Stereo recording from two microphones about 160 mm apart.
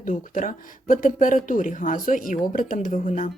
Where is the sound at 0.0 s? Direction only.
55° left (ahead or behind).